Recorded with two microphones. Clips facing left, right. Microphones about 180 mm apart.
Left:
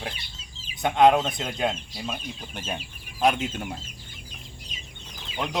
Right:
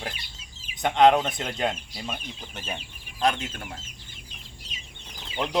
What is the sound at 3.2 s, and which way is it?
Speech, 15° left (ahead or behind).